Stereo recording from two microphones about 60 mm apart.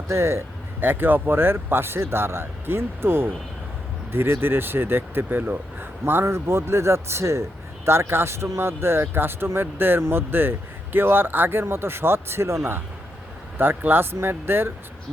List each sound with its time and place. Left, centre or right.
0.1 s speech: right
0.8 s speech: right
6.2 s speech: right